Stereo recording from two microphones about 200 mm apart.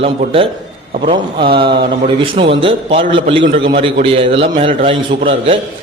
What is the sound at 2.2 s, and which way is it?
A man's voice, 25° right (ahead or behind).